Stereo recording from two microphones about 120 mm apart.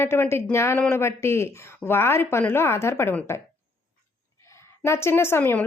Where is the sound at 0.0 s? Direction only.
20° left (ahead or behind).